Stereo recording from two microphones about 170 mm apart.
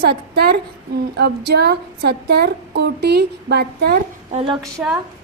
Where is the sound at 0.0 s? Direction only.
70° right (ahead or behind).